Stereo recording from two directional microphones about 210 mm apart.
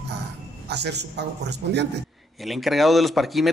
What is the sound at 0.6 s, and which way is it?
A man's voice, 50° right (ahead or behind).